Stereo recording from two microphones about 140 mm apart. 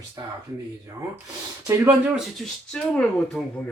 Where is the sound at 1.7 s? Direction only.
15° right (ahead or behind).